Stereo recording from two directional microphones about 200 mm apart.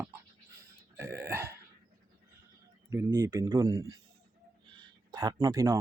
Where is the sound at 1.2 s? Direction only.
10° right (ahead or behind).